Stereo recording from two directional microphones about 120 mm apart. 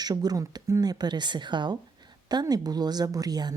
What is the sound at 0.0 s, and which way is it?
Speech, 35° right (ahead or behind).